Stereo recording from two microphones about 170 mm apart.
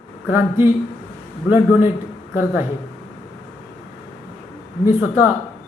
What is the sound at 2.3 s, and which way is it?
Speech, 10° right (ahead or behind).